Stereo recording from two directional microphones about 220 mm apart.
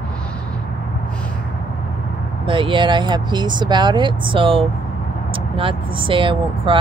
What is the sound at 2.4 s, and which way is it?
Speech, 25° right (ahead or behind).